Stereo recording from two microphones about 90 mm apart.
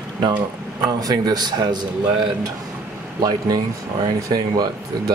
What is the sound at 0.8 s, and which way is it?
Speech, 45° right (ahead or behind).